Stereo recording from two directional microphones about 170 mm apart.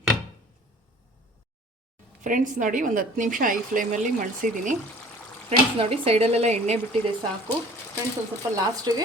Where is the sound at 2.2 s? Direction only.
50° right (ahead or behind).